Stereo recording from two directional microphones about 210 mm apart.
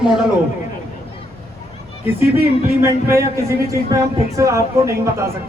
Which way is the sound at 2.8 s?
10° right (ahead or behind).